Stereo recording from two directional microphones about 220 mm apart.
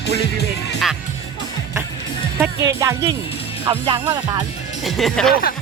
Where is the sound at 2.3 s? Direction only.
10° right (ahead or behind).